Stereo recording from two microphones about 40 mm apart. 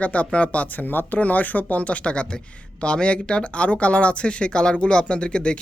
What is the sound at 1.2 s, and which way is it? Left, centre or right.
A woman's voice, left.